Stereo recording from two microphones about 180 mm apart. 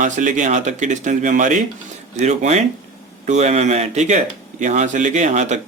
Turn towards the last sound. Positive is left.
turn(degrees=-40)  # may be behind; listen again after turning